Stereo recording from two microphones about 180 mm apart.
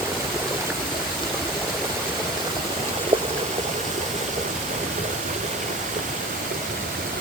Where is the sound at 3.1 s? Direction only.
30° right (ahead or behind).